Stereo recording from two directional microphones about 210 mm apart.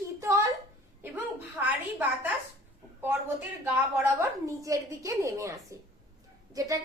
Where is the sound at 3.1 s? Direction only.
10° right (ahead or behind).